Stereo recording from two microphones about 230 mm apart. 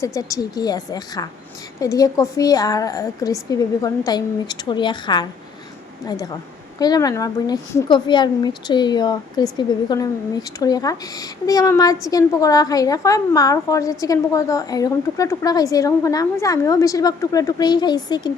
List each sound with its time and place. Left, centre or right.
0.0 s a woman's voice: centre
6.7 s a woman's voice: centre